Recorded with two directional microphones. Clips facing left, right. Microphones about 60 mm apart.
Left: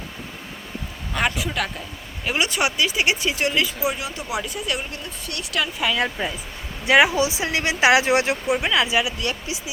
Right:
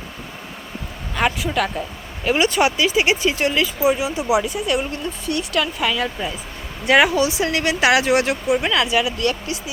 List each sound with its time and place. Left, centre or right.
1.1 s speech: centre
3.9 s speech: centre
4.4 s speech: centre
6.0 s speech: centre